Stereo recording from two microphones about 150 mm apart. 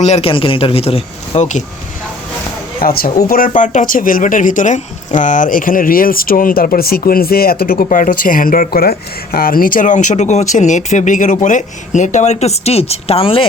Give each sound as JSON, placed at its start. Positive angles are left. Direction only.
{"t": 0.0, "sound": "speech", "side_deg": 45}
{"t": 2.8, "sound": "a woman's voice", "side_deg": 85}
{"t": 3.2, "sound": "speech", "side_deg": 70}
{"t": 7.9, "sound": "speech", "side_deg": 60}